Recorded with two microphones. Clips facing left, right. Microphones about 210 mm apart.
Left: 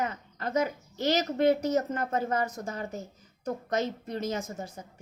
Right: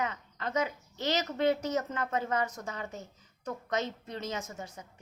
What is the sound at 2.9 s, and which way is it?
Speech, 10° left (ahead or behind).